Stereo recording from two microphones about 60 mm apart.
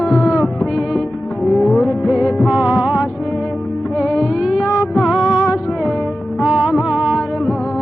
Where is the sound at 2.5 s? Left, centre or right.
Centre.